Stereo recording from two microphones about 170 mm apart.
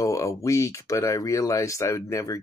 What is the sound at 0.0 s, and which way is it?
Speech, 20° left (ahead or behind).